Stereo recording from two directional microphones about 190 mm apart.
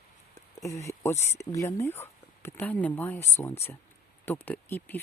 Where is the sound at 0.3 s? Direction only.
15° left (ahead or behind).